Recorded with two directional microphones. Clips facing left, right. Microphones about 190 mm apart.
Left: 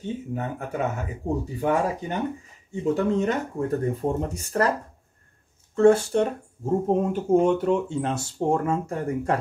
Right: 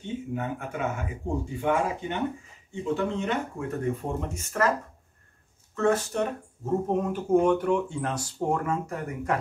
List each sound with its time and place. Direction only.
0.0 s speech: 40° left (ahead or behind)
5.8 s speech: 30° left (ahead or behind)